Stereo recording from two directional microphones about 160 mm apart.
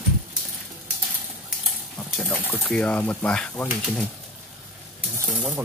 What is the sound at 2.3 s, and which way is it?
Speech, centre (ahead or behind).